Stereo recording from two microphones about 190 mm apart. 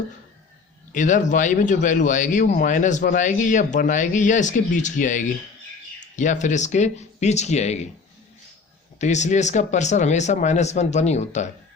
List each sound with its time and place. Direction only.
0.9 s speech: 40° left (ahead or behind)
9.0 s speech: 40° left (ahead or behind)